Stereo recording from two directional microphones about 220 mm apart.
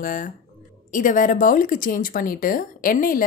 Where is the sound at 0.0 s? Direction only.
40° left (ahead or behind).